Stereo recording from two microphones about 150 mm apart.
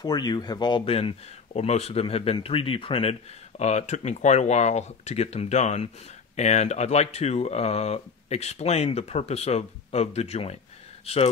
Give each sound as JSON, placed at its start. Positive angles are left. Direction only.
{"t": 0.0, "sound": "speech", "side_deg": 25}